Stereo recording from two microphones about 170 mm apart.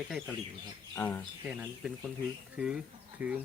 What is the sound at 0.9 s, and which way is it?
Speech, 15° left (ahead or behind).